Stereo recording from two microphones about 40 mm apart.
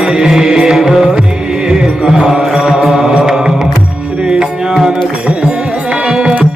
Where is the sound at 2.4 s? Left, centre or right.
Centre.